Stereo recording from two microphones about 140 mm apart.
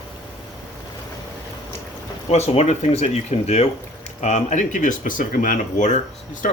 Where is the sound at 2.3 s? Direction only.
50° left (ahead or behind).